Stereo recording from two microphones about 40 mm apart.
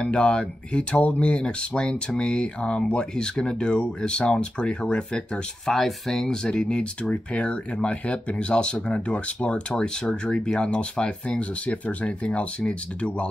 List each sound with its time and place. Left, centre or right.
0.0 s speech: left
5.7 s speech: centre
6.2 s speech: left